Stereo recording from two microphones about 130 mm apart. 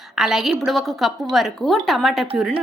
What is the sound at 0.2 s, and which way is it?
A woman's voice, centre (ahead or behind).